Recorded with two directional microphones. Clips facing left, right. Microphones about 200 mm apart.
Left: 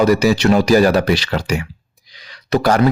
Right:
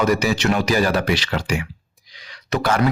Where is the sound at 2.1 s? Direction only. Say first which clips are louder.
Left 6 dB; 35° left (ahead or behind).